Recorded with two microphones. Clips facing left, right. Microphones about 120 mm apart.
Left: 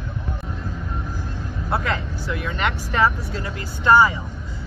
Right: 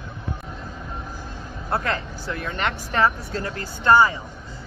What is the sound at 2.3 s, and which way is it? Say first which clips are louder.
Speech: left 1 dB; 40° right (ahead or behind).